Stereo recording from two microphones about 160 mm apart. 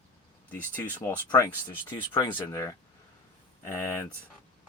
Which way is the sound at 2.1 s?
30° left (ahead or behind).